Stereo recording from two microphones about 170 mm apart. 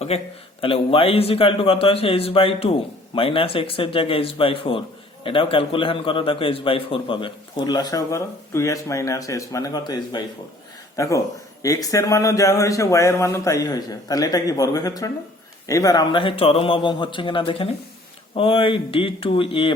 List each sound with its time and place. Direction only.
0.1 s a man's voice: 35° left (ahead or behind)